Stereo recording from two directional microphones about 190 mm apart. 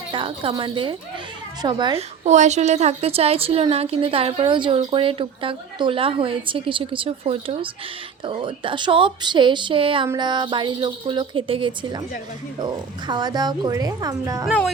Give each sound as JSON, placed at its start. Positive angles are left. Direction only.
{"t": 0.1, "sound": "a woman's voice", "side_deg": -25}
{"t": 2.2, "sound": "a woman's voice", "side_deg": -40}